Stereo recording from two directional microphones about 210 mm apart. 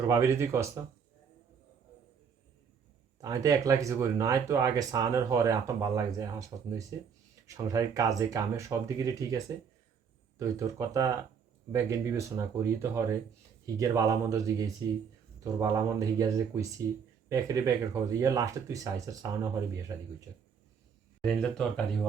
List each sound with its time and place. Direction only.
0.1 s speech: 15° right (ahead or behind)
3.2 s speech: 15° right (ahead or behind)
21.2 s speech: 5° left (ahead or behind)